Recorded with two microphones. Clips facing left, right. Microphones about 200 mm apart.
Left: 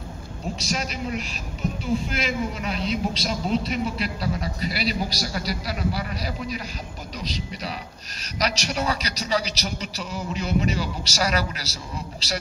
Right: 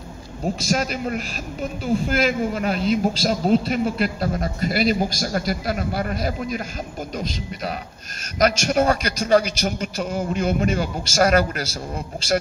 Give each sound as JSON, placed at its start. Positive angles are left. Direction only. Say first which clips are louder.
{"t": 0.6, "sound": "a man's voice", "louder": "right 5 dB", "side_deg": -50}